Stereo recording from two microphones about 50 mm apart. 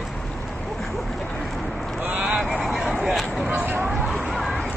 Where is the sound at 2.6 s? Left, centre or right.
Centre.